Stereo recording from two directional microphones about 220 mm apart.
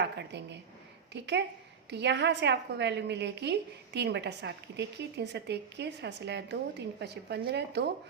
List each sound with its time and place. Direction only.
0.0 s a woman's voice: 50° right (ahead or behind)